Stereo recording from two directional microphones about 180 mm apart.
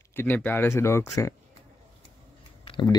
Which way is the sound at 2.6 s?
30° left (ahead or behind).